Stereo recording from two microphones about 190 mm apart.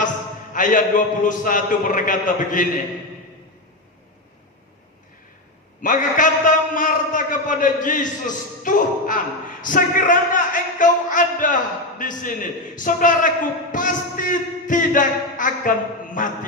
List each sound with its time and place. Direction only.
0.5 s a man's voice: 45° left (ahead or behind)
5.8 s a man's voice: 45° left (ahead or behind)